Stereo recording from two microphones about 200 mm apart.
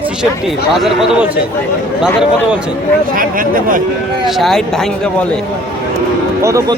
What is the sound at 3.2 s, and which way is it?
Speech, 45° right (ahead or behind).